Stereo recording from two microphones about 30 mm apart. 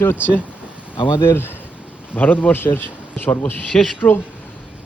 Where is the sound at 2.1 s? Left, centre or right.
Left.